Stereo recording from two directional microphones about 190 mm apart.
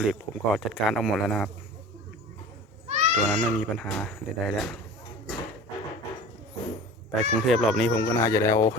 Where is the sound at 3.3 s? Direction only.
Centre (ahead or behind).